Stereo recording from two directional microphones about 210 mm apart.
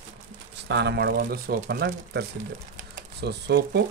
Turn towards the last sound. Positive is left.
turn(degrees=-55)  # may be behind; listen again after turning